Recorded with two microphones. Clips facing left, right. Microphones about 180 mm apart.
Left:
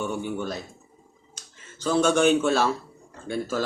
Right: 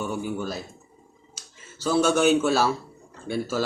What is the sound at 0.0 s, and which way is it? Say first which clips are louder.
Speech: even; 5° right (ahead or behind).